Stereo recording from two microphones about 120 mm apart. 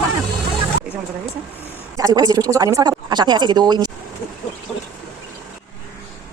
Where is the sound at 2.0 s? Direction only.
30° right (ahead or behind).